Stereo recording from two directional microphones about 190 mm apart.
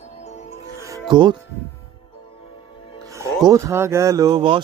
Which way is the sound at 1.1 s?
25° right (ahead or behind).